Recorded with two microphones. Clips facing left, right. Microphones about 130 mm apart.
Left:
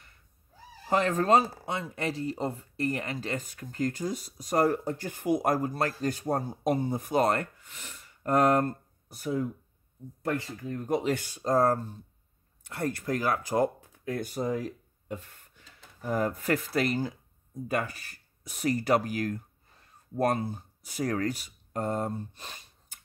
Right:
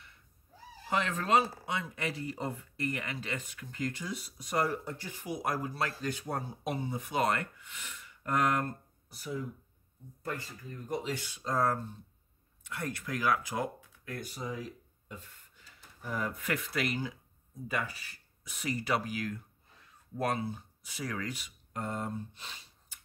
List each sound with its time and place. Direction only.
0.8 s speech: 40° left (ahead or behind)
9.1 s speech: 55° left (ahead or behind)
10.2 s speech: 80° left; by 15.9 s 65° left (ahead or behind)
16.0 s speech: 45° left (ahead or behind)
17.6 s speech: 50° left (ahead or behind)